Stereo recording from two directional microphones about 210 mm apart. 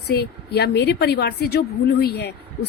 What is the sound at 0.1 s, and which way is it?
A woman's voice, 50° left (ahead or behind).